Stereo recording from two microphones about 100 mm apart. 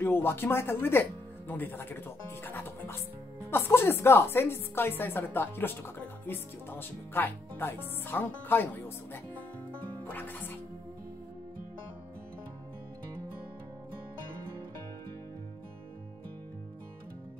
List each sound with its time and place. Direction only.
0.0 s a woman's voice: 25° left (ahead or behind)